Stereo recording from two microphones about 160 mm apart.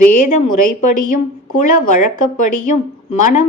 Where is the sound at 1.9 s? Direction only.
55° left (ahead or behind).